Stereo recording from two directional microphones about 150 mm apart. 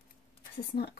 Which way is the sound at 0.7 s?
90° left.